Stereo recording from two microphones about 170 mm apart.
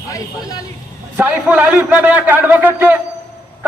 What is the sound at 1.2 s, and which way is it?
A man's voice, 10° right (ahead or behind).